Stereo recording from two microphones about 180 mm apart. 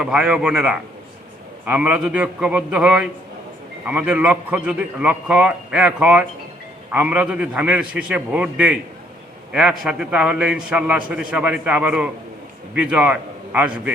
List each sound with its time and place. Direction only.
0.0 s a man's voice: 5° right (ahead or behind)